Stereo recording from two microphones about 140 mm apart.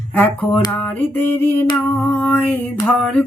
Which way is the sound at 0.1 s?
10° left (ahead or behind).